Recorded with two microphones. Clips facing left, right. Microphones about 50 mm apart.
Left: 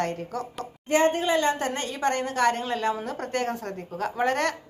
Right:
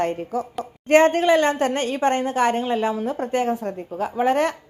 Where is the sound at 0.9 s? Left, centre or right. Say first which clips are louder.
Right 7 dB; right.